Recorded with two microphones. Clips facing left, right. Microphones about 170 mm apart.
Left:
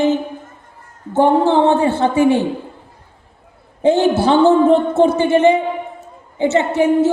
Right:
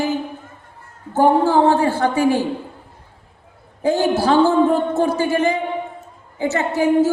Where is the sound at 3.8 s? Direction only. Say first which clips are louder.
Left 4 dB; 25° left (ahead or behind).